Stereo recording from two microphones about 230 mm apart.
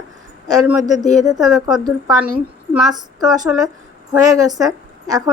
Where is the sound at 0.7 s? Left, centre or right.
Centre.